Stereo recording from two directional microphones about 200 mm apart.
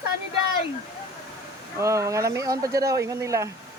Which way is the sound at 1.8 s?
15° right (ahead or behind).